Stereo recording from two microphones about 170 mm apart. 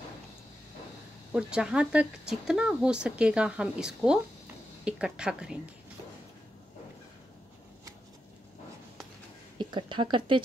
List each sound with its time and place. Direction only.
1.3 s speech: 5° right (ahead or behind)
9.6 s speech: 30° right (ahead or behind)